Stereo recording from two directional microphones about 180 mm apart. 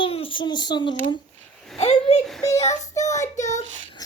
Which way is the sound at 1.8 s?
35° left (ahead or behind).